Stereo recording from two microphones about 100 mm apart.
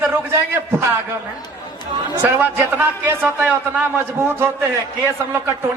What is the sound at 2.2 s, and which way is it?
Speech, 20° right (ahead or behind).